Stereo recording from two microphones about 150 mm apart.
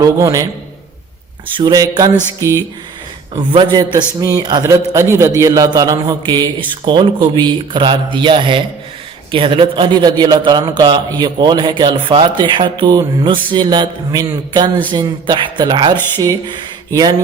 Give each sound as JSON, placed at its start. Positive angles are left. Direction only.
{"t": 0.0, "sound": "a man's voice", "side_deg": -20}
{"t": 1.5, "sound": "a man's voice", "side_deg": -25}
{"t": 3.5, "sound": "a man's voice", "side_deg": -30}